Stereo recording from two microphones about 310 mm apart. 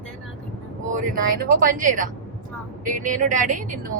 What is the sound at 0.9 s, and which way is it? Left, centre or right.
A woman's voice, right.